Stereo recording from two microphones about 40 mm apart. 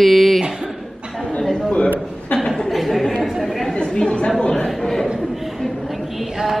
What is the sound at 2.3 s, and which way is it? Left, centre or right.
Chuckle, left.